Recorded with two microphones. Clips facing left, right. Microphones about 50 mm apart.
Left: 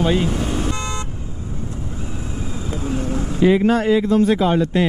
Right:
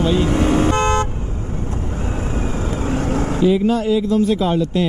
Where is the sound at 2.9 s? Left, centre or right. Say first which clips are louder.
Right 3 dB; right.